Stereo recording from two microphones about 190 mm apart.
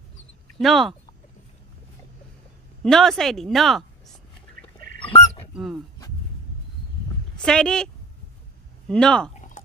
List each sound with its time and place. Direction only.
0.6 s speech: centre (ahead or behind)
2.8 s speech: centre (ahead or behind)
4.6 s goose: 50° right (ahead or behind)
5.0 s fowl: 25° left (ahead or behind)
7.4 s speech: 5° left (ahead or behind)
9.3 s a sound: 40° left (ahead or behind)